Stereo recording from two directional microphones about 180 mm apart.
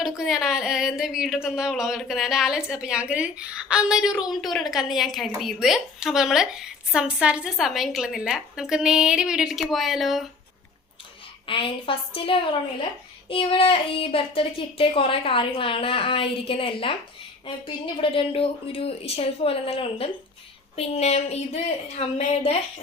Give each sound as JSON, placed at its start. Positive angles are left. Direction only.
{"t": 0.2, "sound": "speech", "side_deg": 0}
{"t": 11.4, "sound": "a woman's voice", "side_deg": 30}
{"t": 17.9, "sound": "a child's voice", "side_deg": 30}